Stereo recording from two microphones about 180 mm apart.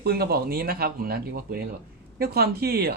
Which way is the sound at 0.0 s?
60° right (ahead or behind).